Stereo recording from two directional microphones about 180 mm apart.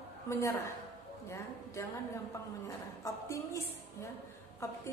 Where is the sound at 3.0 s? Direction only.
15° left (ahead or behind).